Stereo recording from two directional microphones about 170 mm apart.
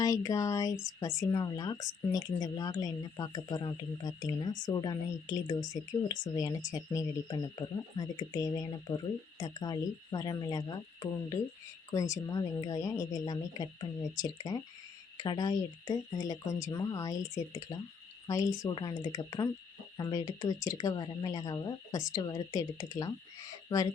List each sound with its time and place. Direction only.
0.0 s speech: 20° left (ahead or behind)
18.3 s speech: 20° left (ahead or behind)